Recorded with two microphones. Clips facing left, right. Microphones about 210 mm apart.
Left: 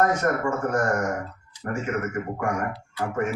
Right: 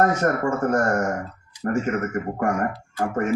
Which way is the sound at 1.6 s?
50° right (ahead or behind).